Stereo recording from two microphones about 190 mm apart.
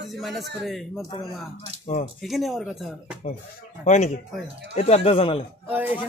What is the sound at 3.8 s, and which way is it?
Speech, 35° left (ahead or behind).